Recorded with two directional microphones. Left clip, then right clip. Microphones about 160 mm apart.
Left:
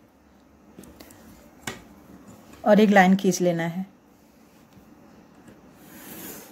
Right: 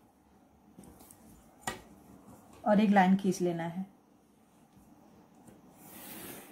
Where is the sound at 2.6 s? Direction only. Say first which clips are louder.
Left 9 dB; 65° left (ahead or behind).